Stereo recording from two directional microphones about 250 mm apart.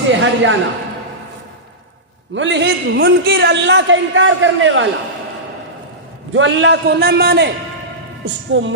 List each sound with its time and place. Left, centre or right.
0.1 s a man's voice: right
2.3 s a man's voice: right
6.3 s a man's voice: right